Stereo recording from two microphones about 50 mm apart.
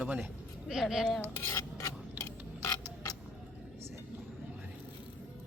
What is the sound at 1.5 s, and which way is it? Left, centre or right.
Filing, left.